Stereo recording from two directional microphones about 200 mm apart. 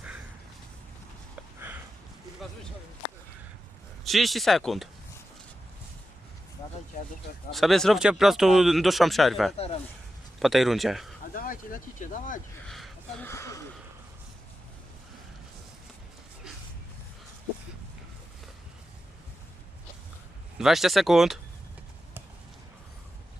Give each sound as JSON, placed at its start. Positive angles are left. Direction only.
{"t": 4.0, "sound": "speech", "side_deg": 0}
{"t": 7.5, "sound": "speech", "side_deg": 0}
{"t": 9.6, "sound": "speech", "side_deg": 30}
{"t": 10.4, "sound": "speech", "side_deg": 0}
{"t": 11.3, "sound": "speech", "side_deg": 45}
{"t": 12.6, "sound": "a sound", "side_deg": 0}
{"t": 13.2, "sound": "speech", "side_deg": 15}
{"t": 20.6, "sound": "speech", "side_deg": 0}